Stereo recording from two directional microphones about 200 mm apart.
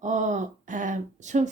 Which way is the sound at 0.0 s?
35° right (ahead or behind).